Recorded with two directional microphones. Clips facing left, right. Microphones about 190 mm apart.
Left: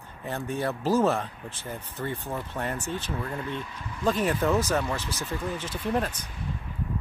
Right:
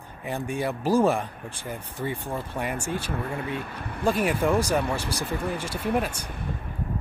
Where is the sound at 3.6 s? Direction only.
60° right (ahead or behind).